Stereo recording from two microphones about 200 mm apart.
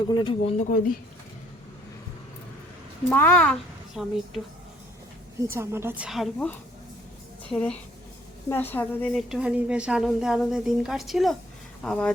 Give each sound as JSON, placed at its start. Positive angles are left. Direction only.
{"t": 0.1, "sound": "speech", "side_deg": 25}
{"t": 3.1, "sound": "speech", "side_deg": 10}
{"t": 5.5, "sound": "a woman's voice", "side_deg": -10}
{"t": 7.5, "sound": "a woman's voice", "side_deg": 5}